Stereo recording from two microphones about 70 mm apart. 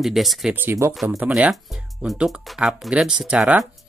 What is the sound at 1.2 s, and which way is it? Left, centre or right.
Speech, centre.